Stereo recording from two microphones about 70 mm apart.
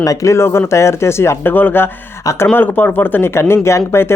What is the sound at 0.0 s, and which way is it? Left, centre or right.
Speech, left.